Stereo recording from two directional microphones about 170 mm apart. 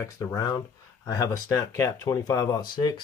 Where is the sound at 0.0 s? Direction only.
15° left (ahead or behind).